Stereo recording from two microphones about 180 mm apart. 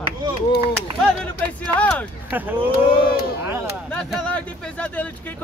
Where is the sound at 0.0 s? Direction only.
25° right (ahead or behind).